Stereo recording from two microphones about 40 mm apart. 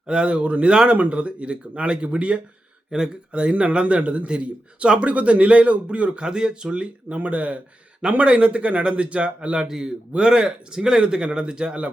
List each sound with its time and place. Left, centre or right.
0.0 s speech: right
6.2 s speech: right
9.6 s a man's voice: centre